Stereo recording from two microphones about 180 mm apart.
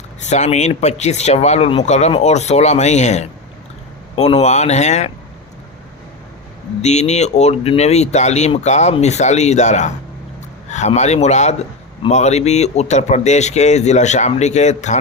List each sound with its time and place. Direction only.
0.2 s speech: 40° left (ahead or behind)
6.8 s speech: 40° left (ahead or behind)